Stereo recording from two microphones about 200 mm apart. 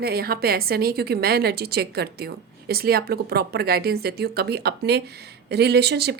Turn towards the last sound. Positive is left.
turn(degrees=-55)  # may be behind; listen again after turning